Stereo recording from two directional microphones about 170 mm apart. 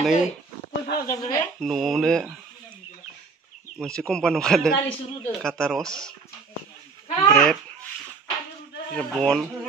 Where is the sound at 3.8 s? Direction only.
5° left (ahead or behind).